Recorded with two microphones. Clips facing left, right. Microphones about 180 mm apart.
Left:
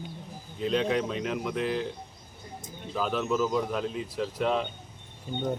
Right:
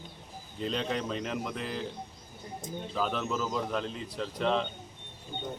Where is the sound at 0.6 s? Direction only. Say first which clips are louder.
Left 6 dB; 5° left (ahead or behind).